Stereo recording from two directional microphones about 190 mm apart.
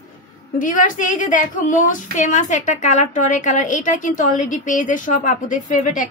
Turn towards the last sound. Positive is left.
turn(degrees=45)  # may be behind; listen again after turning